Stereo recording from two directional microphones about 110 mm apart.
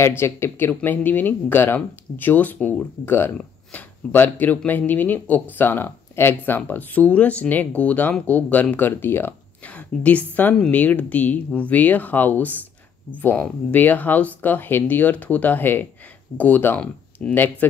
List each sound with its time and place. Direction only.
0.2 s speech: 20° left (ahead or behind)